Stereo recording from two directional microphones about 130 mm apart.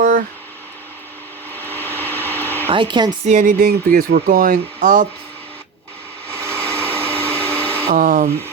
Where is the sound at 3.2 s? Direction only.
80° right.